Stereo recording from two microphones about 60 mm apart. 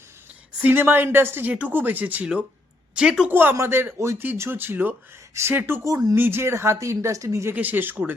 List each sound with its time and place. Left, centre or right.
0.6 s speech: right
2.9 s speech: centre
3.2 s speech: right
5.3 s speech: right
6.4 s speech: right
6.7 s speech: right
7.5 s speech: right